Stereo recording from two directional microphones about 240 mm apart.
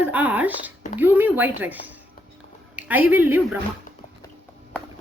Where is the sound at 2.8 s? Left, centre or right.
Centre.